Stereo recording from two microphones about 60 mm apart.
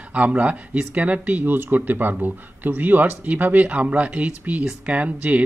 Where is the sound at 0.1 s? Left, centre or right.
Right.